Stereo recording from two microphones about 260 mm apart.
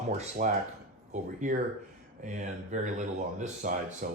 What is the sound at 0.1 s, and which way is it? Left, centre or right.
Speech, right.